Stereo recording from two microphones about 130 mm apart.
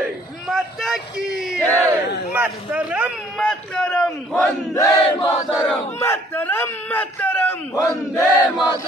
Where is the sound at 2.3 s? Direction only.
10° right (ahead or behind).